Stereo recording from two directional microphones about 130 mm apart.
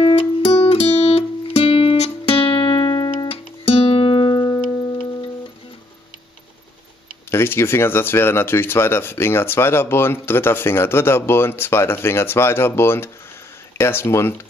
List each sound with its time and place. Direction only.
0.0 s music: 45° left (ahead or behind); by 3.3 s 30° left (ahead or behind)
3.3 s music: 45° left (ahead or behind); by 4.9 s 30° left (ahead or behind)
7.2 s speech: 20° left (ahead or behind)